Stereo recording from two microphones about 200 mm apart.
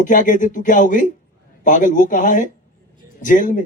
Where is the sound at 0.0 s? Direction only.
40° left (ahead or behind).